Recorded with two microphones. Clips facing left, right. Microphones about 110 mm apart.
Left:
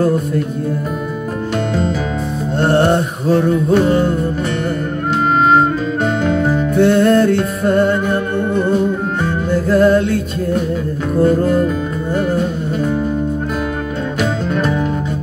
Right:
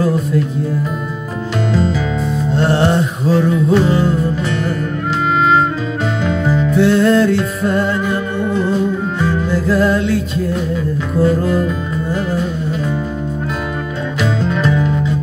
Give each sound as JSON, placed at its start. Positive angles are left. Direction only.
{"t": 0.0, "sound": "music", "side_deg": 55}
{"t": 1.7, "sound": "music", "side_deg": 50}
{"t": 5.4, "sound": "music", "side_deg": 50}
{"t": 14.4, "sound": "music", "side_deg": 50}